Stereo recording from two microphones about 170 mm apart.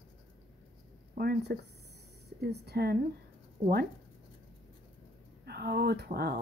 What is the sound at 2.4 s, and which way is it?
Speech, 70° right (ahead or behind).